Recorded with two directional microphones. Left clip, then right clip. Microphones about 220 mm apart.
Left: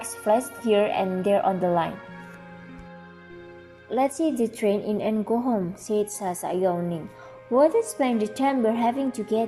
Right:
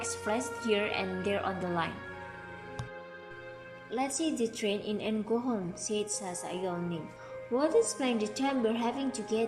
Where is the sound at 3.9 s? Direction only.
20° left (ahead or behind).